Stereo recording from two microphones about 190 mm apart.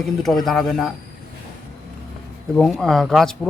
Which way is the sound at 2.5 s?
5° left (ahead or behind).